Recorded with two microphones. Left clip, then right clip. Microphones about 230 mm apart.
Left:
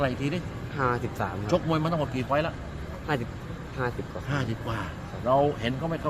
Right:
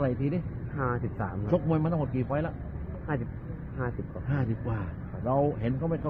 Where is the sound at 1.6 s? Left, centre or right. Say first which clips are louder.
Left 3 dB; right.